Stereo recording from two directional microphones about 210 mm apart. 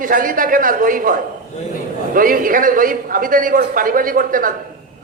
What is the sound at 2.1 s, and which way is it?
A man's voice, 40° right (ahead or behind).